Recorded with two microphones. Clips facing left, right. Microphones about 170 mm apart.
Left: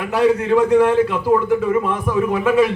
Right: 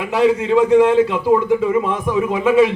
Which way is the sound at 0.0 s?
15° right (ahead or behind).